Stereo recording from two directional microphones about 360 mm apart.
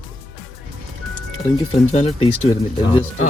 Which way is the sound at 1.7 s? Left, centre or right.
Centre.